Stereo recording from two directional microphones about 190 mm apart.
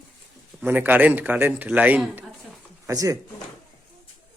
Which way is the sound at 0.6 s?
10° right (ahead or behind).